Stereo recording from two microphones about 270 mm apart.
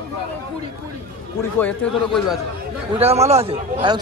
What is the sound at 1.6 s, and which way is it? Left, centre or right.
Speech, centre.